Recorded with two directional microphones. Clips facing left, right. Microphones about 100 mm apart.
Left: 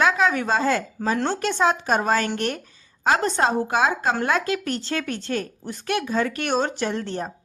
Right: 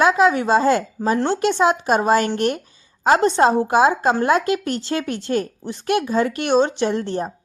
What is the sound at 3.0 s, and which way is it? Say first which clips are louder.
Speech: right 5 dB; 25° right (ahead or behind).